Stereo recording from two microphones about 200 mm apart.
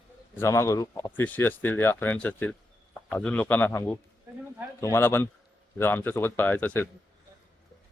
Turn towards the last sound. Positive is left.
turn(degrees=10)  # may be behind; listen again after turning